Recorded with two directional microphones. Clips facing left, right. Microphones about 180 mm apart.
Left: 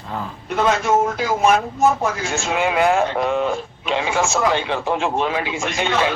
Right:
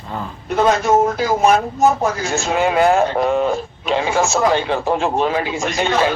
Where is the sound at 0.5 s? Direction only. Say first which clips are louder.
Right 3 dB; 40° right (ahead or behind).